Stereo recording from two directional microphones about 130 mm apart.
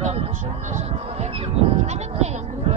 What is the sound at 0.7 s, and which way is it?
Speech, 55° right (ahead or behind).